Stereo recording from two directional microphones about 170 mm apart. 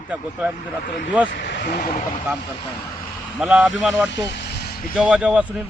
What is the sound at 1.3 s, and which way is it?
Speech, 90° left.